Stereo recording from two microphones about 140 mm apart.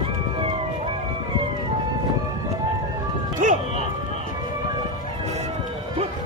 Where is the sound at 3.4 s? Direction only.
65° right (ahead or behind).